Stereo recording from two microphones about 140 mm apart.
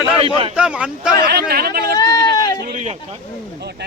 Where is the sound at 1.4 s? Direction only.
90° right.